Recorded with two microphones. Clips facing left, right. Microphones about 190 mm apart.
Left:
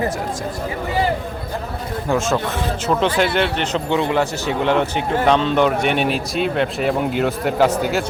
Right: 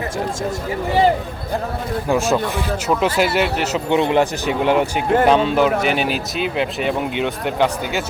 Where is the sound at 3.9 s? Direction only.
20° right (ahead or behind); by 8.0 s centre (ahead or behind).